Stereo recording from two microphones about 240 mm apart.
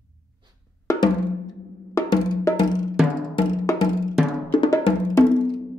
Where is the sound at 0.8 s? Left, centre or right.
Centre.